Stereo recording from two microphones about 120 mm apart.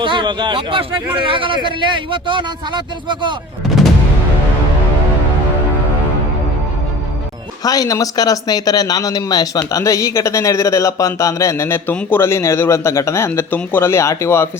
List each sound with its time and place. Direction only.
0.0 s speech: 40° right (ahead or behind)
7.6 s speech: 30° left (ahead or behind)